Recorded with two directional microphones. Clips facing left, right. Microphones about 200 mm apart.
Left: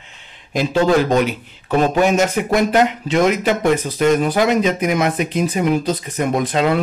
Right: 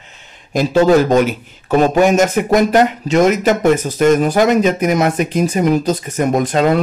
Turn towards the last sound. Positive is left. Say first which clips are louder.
# right 3 dB
turn(degrees=-45)  # may be behind; listen again after turning